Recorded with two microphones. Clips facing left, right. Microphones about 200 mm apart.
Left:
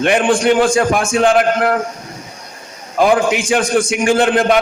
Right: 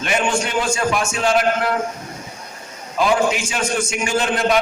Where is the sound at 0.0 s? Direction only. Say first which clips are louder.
Left 7 dB; 55° left (ahead or behind).